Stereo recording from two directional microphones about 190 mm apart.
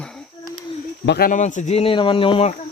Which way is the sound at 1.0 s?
60° left (ahead or behind).